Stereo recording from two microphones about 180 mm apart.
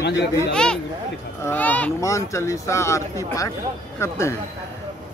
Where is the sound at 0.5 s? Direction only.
5° left (ahead or behind).